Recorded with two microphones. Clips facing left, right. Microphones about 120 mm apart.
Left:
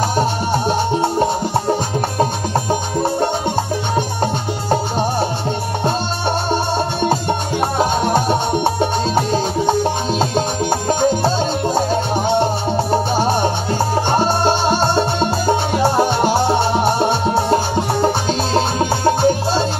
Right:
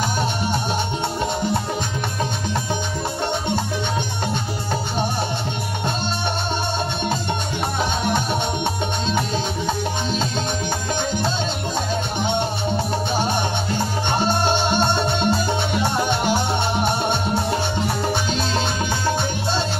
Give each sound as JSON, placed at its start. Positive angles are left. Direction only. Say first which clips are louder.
{"t": 1.2, "sound": "music", "louder": "left 5 dB", "side_deg": 40}
{"t": 7.8, "sound": "music", "louder": "left 6 dB", "side_deg": 40}